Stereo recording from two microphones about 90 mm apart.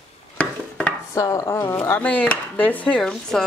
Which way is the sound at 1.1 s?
35° left (ahead or behind).